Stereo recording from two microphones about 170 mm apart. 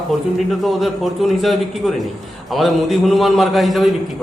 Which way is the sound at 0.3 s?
Centre (ahead or behind).